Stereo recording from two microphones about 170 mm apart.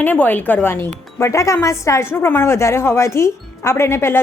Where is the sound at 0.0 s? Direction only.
10° left (ahead or behind).